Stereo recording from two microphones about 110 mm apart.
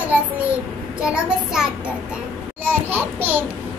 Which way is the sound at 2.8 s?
20° right (ahead or behind).